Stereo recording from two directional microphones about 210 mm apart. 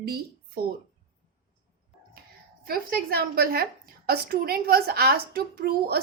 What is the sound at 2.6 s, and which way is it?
A woman's voice, 45° right (ahead or behind).